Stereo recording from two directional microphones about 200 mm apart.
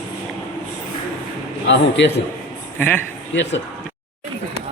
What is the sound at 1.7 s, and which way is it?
Speech, 60° left (ahead or behind).